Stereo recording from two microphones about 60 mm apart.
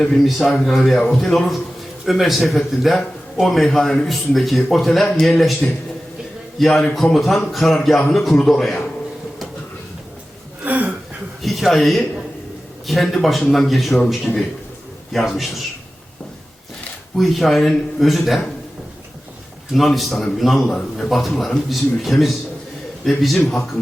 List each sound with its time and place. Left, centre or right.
0.0 s a man's voice: centre
5.0 s a man's voice: centre
10.6 s a sound: right
11.4 s a man's voice: centre
17.2 s a man's voice: centre
19.7 s a man's voice: centre